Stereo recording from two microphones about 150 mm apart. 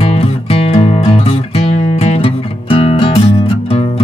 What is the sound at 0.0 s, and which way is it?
Music, 40° left (ahead or behind).